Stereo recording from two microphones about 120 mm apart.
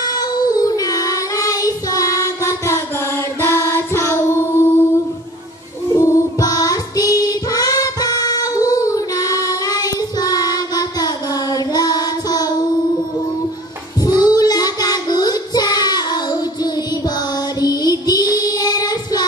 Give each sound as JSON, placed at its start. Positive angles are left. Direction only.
{"t": 0.0, "sound": "child singing", "side_deg": 35}
{"t": 3.3, "sound": "music", "side_deg": 20}
{"t": 5.9, "sound": "music", "side_deg": 25}
{"t": 14.0, "sound": "child singing", "side_deg": 35}
{"t": 17.6, "sound": "music", "side_deg": 35}